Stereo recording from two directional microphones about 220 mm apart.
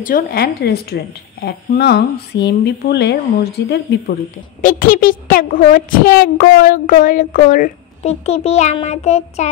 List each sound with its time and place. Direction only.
0.0 s speech: 40° left (ahead or behind)
4.6 s a woman's voice: 40° left (ahead or behind)